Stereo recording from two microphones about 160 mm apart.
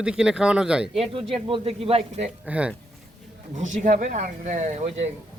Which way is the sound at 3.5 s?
50° right (ahead or behind).